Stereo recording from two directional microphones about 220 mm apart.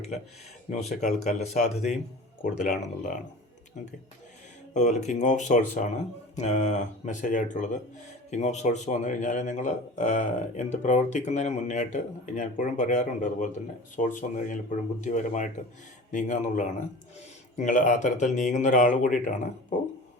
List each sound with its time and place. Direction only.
0.7 s a man's voice: 30° left (ahead or behind)